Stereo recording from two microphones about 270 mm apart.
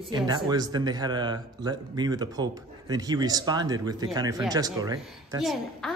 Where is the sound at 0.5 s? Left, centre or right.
Centre.